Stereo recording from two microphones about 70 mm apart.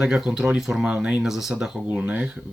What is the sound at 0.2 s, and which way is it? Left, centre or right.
Speech, centre.